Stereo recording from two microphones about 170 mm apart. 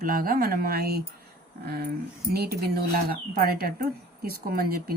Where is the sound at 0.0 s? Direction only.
55° right (ahead or behind).